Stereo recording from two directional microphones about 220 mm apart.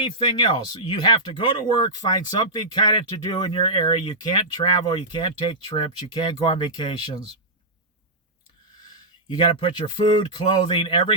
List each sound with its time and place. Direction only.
0.0 s speech: 20° left (ahead or behind)
9.3 s speech: 20° left (ahead or behind)